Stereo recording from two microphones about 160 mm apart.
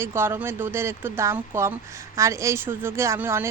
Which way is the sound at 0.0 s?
15° right (ahead or behind).